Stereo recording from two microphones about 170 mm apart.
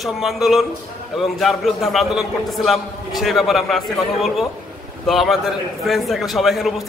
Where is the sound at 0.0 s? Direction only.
Centre (ahead or behind).